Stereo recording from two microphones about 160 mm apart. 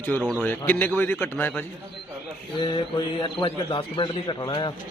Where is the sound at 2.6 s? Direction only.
35° left (ahead or behind).